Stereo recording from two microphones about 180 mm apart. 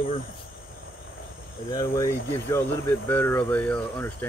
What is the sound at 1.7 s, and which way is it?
Speech, 25° left (ahead or behind).